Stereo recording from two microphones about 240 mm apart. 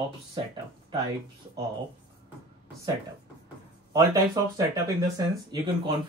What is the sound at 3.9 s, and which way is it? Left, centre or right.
Speech, centre.